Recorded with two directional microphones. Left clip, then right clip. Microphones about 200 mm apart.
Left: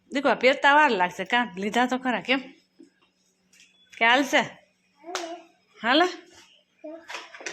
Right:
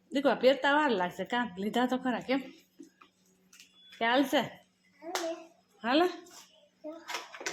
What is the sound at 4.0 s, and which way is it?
Speech, 5° right (ahead or behind).